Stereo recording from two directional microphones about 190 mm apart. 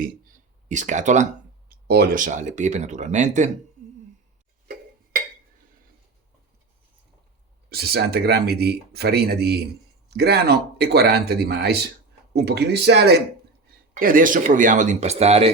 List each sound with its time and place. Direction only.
0.7 s speech: 40° right (ahead or behind)
1.9 s speech: 55° right (ahead or behind); by 3.5 s 40° right (ahead or behind)
7.7 s speech: 55° right (ahead or behind)
13.9 s speech: 45° right (ahead or behind)